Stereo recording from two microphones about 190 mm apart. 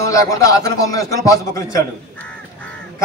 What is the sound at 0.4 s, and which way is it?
A man's voice, 15° left (ahead or behind).